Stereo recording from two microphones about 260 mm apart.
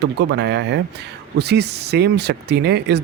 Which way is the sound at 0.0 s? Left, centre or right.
Right.